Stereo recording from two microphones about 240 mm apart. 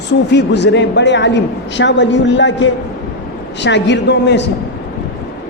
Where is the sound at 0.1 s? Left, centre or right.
Left.